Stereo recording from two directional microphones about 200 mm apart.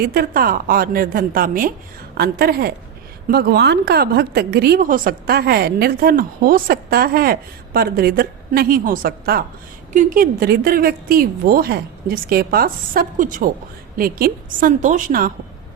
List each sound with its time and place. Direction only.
0.0 s a woman's voice: 50° right (ahead or behind)